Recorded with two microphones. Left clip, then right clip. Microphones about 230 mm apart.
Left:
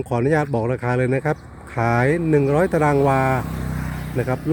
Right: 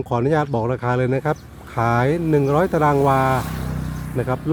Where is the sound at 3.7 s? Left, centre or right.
Left.